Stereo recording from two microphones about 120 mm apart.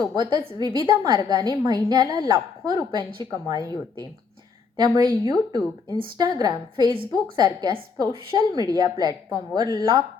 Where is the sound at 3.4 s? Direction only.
30° right (ahead or behind).